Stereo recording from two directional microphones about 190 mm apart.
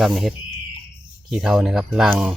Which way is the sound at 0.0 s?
Centre (ahead or behind).